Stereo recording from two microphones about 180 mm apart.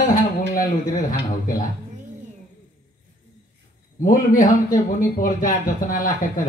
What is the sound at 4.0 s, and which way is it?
A man's voice, 50° left (ahead or behind).